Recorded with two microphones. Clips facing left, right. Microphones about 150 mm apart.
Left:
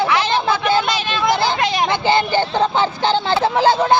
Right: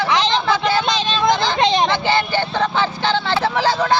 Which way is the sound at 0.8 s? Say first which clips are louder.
Right 1 dB; 20° right (ahead or behind).